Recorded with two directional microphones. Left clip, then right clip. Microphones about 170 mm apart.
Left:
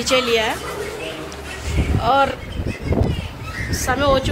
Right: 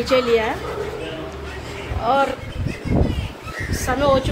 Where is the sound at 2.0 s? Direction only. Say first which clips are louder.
Left 2 dB; 5° right (ahead or behind).